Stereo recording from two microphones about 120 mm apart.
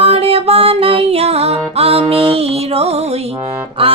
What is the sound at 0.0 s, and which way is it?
Music, 50° right (ahead or behind).